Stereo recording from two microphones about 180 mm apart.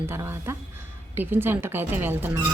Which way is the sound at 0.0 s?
15° right (ahead or behind).